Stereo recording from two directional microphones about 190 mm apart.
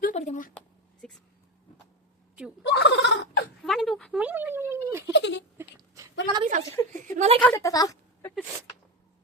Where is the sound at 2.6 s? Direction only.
65° left (ahead or behind).